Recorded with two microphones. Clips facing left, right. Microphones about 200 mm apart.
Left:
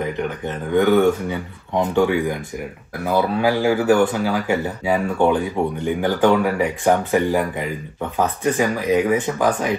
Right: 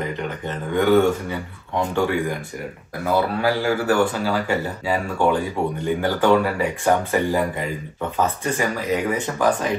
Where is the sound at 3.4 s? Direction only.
15° left (ahead or behind).